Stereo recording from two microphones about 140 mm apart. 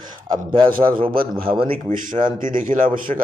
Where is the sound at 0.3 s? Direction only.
35° right (ahead or behind).